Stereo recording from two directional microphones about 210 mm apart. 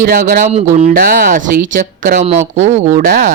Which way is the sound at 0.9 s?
40° right (ahead or behind).